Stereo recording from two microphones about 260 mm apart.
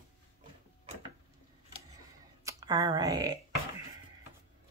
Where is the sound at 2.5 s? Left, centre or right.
Centre.